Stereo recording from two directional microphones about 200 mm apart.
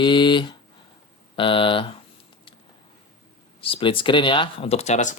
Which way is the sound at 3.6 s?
25° left (ahead or behind).